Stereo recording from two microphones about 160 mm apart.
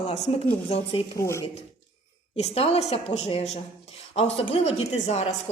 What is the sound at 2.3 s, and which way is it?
A woman's voice, 40° left (ahead or behind).